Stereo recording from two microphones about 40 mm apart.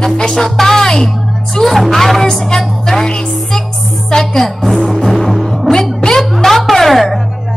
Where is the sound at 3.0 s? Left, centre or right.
Centre.